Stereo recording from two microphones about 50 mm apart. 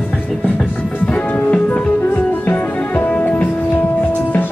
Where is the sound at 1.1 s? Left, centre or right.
Left.